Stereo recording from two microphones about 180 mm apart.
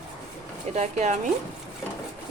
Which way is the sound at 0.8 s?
40° right (ahead or behind).